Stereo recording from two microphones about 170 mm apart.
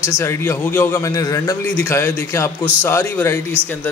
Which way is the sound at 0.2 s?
15° left (ahead or behind).